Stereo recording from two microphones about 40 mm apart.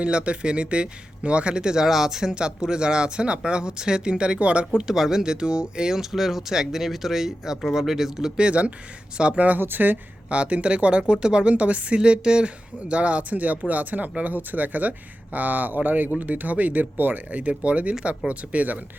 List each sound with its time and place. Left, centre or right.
0.0 s speech: right
4.8 s speech: centre
6.0 s speech: centre
8.4 s speech: right
9.6 s speech: right
10.2 s speech: right
11.9 s speech: right
12.9 s speech: right
16.1 s speech: right
17.5 s speech: right